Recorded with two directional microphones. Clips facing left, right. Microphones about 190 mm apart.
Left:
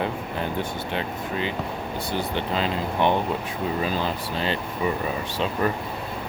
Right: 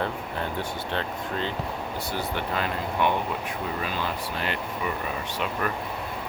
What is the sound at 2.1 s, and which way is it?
Speech, 25° left (ahead or behind).